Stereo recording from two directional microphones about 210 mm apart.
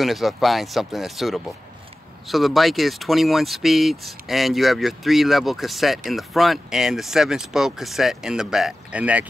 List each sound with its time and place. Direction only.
0.0 s speech: centre (ahead or behind)